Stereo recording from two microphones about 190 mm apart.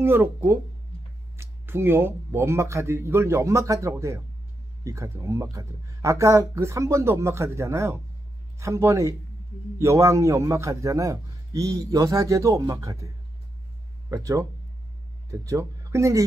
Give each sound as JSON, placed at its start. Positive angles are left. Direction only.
{"t": 0.0, "sound": "a man's voice", "side_deg": -10}
{"t": 14.1, "sound": "a man's voice", "side_deg": -15}
{"t": 15.4, "sound": "a man's voice", "side_deg": -15}